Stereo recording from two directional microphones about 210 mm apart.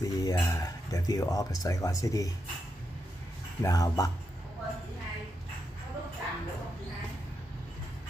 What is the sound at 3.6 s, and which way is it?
Speech, 15° left (ahead or behind).